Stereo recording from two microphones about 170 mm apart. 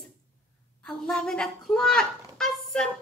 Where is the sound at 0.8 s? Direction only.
5° left (ahead or behind).